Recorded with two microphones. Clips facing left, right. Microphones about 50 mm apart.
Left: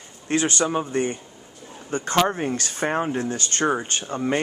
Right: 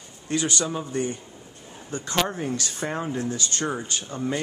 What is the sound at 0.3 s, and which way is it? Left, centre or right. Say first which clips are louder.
Speech: left 4 dB; left.